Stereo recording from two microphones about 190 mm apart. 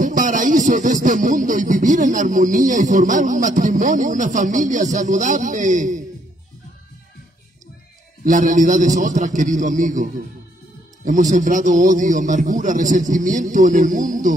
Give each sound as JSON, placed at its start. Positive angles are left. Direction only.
{"t": 0.0, "sound": "music", "side_deg": -40}
{"t": 8.3, "sound": "a man's voice", "side_deg": -40}